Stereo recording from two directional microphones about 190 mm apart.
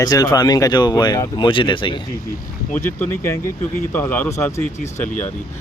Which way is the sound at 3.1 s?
15° left (ahead or behind).